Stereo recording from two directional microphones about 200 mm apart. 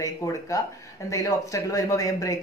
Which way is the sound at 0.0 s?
15° left (ahead or behind).